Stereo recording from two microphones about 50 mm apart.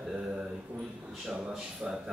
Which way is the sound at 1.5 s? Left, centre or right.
Centre.